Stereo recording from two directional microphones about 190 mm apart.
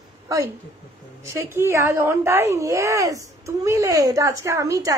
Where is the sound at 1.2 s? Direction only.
15° right (ahead or behind).